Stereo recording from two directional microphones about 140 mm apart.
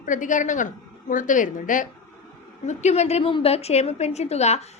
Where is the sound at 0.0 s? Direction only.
65° left (ahead or behind).